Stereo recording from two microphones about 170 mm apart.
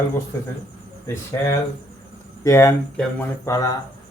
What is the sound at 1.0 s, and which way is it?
Speech, 15° left (ahead or behind).